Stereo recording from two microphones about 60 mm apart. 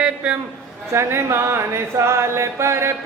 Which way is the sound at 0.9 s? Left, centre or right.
Right.